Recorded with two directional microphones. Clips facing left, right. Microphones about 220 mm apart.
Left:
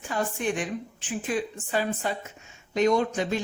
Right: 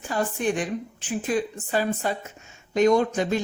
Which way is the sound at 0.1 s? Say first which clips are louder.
Right 3 dB; 40° right (ahead or behind).